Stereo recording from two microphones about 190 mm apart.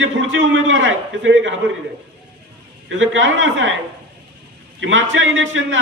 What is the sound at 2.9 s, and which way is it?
Speech, 90° right.